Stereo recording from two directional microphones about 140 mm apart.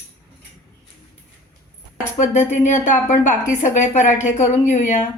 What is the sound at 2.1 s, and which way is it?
A woman's voice, 55° left (ahead or behind).